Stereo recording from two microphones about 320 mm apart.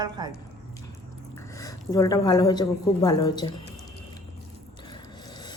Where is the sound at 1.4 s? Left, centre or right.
Centre.